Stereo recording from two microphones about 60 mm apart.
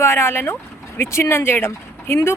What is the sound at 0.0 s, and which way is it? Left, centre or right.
Speech, left.